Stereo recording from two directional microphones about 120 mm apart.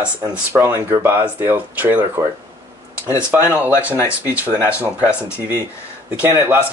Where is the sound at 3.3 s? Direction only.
15° right (ahead or behind).